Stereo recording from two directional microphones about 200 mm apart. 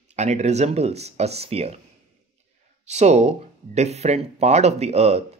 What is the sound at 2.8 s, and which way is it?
Speech, 35° right (ahead or behind).